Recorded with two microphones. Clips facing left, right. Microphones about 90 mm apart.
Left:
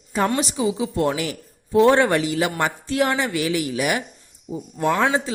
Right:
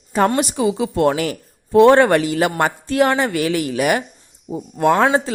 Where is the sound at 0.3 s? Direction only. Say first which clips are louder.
Right 4 dB; 55° right (ahead or behind).